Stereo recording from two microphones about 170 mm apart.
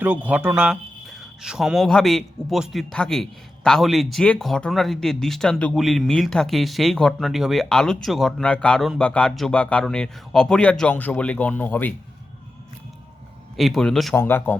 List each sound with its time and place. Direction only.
0.0 s speech: 10° right (ahead or behind); by 11.9 s 10° left (ahead or behind)
13.6 s speech: centre (ahead or behind)